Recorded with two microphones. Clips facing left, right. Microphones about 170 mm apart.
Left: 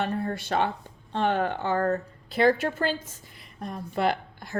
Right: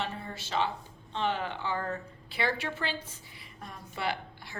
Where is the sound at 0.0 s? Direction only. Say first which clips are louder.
Left 8 dB; 55° left (ahead or behind).